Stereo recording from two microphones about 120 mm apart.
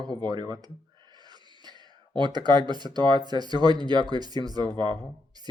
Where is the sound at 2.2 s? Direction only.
35° right (ahead or behind).